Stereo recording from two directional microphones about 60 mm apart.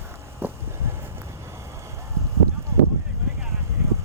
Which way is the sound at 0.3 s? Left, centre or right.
Right.